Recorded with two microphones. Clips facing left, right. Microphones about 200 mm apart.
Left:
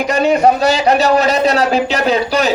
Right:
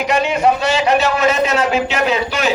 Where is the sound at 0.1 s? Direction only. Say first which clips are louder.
Left 4 dB; 35° left (ahead or behind).